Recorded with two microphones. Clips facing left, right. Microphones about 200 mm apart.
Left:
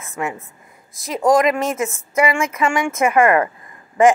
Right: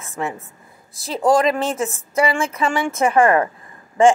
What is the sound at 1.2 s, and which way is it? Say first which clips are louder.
A woman's voice: left 1 dB; 30° right (ahead or behind).